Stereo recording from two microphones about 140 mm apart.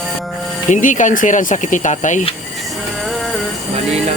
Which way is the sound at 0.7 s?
65° left (ahead or behind).